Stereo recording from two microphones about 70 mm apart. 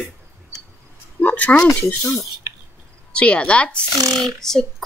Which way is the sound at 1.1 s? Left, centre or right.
Left.